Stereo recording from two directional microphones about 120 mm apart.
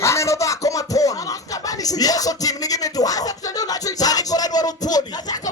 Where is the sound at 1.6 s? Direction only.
30° left (ahead or behind).